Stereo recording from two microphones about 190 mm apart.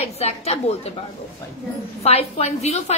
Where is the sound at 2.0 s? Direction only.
35° left (ahead or behind).